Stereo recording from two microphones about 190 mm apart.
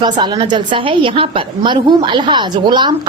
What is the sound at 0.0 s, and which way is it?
A woman's voice, 20° right (ahead or behind).